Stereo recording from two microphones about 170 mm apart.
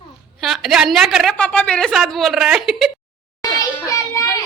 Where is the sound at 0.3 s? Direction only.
Centre (ahead or behind).